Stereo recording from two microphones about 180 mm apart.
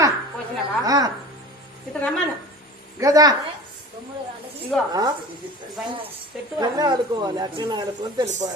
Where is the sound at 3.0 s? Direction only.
20° right (ahead or behind).